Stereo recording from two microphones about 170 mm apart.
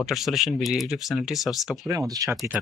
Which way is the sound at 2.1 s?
20° right (ahead or behind).